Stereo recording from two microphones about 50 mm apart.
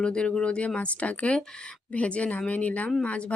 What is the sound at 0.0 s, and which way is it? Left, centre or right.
A woman's voice, centre.